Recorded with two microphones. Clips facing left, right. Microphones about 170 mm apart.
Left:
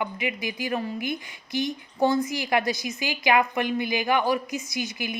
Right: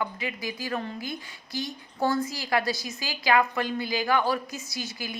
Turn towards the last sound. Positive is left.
turn(degrees=20)  # may be behind; listen again after turning